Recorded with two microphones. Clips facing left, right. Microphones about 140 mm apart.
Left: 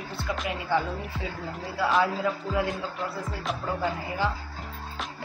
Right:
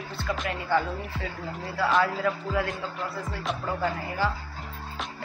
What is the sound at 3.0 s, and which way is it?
Music, centre (ahead or behind).